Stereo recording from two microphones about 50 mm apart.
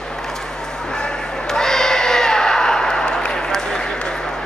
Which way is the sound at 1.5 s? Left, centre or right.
Centre.